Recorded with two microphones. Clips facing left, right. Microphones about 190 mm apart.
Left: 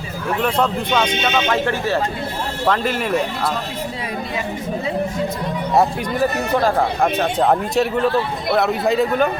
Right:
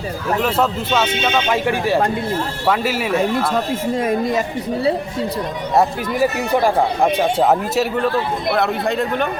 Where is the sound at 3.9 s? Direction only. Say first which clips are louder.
Right 8 dB; 45° right (ahead or behind).